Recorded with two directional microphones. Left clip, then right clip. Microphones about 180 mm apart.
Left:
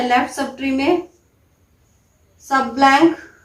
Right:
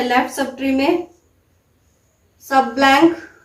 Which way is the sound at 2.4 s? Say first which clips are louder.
Even; 15° left (ahead or behind).